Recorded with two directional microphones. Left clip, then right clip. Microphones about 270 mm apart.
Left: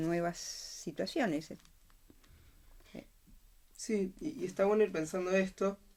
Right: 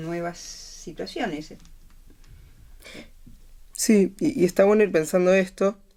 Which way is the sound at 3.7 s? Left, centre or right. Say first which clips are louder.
Right 15 dB; right.